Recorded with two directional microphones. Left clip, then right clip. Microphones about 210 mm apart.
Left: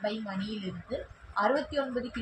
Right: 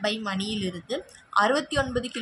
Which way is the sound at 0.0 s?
45° right (ahead or behind).